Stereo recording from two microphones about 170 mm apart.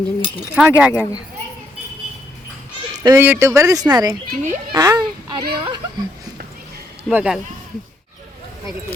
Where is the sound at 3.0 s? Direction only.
15° right (ahead or behind).